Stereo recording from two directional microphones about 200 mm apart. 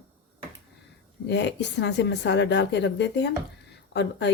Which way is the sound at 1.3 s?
60° left (ahead or behind).